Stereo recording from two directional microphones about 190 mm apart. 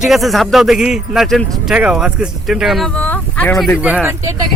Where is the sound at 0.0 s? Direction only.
Centre (ahead or behind).